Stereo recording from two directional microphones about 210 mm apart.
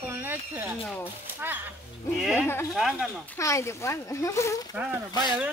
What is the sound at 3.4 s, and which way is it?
Speech, 15° left (ahead or behind).